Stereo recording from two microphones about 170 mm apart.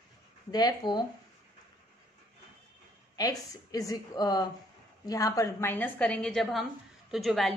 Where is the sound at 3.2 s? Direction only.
20° left (ahead or behind).